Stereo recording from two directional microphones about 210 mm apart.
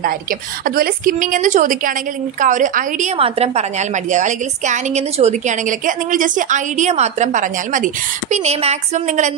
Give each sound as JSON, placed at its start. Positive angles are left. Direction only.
{"t": 0.0, "sound": "a woman's voice", "side_deg": -45}
{"t": 3.2, "sound": "a woman's voice", "side_deg": -30}